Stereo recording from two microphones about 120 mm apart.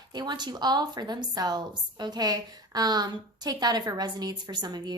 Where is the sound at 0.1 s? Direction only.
35° right (ahead or behind).